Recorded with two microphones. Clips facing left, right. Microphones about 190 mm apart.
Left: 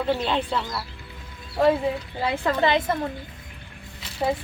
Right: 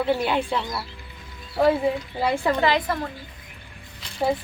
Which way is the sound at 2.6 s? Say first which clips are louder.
Even; 20° left (ahead or behind).